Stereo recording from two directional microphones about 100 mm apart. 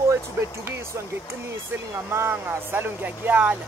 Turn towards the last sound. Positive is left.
turn(degrees=-15)  # may be behind; listen again after turning